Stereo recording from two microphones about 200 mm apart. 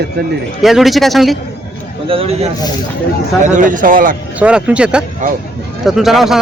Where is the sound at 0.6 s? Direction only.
Centre (ahead or behind).